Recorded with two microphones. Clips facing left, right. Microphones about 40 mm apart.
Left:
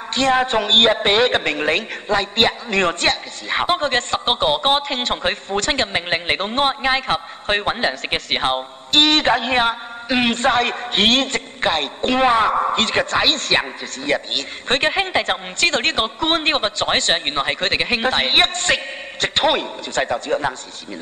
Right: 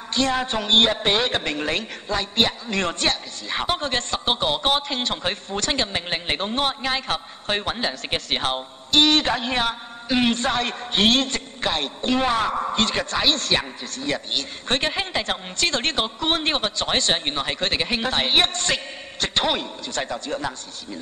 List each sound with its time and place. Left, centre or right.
0.1 s a woman's voice: left
8.9 s speech: left
12.2 s a woman's voice: left
12.7 s speech: left